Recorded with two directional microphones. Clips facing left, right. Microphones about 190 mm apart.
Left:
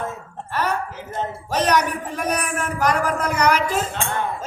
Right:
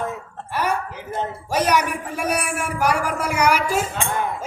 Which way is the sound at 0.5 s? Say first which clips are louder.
Even; 10° right (ahead or behind).